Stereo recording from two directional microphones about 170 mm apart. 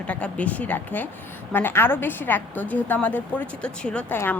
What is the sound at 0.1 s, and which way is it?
A woman's voice, 10° left (ahead or behind).